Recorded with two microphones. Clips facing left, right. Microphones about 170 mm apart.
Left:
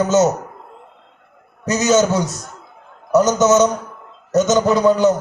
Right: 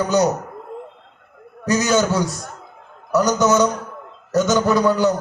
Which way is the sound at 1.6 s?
20° left (ahead or behind).